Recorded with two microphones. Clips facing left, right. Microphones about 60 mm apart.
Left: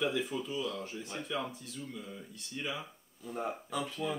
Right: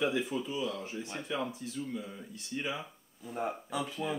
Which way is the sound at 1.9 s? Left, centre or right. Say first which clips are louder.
Right 4 dB; centre.